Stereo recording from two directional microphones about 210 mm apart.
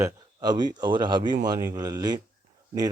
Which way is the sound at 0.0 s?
20° right (ahead or behind).